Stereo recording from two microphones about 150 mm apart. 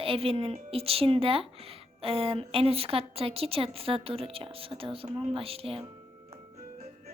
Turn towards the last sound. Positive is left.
turn(degrees=-40)  # may be behind; listen again after turning